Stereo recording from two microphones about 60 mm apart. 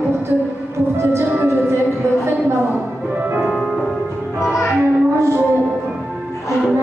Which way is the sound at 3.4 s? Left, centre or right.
Centre.